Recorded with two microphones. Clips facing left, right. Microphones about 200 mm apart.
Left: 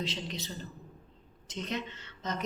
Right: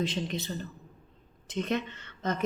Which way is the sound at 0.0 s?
50° right (ahead or behind).